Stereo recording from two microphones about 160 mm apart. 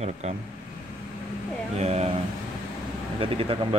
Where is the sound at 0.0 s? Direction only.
40° right (ahead or behind).